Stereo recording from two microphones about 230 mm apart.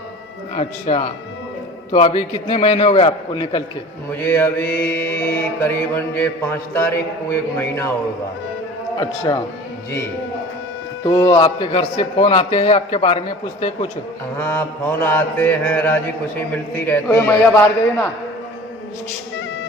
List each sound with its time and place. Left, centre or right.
0.5 s a man's voice: left
4.2 s a man's voice: centre
7.5 s a man's voice: centre
9.0 s a man's voice: centre
11.0 s a man's voice: centre
14.3 s a man's voice: centre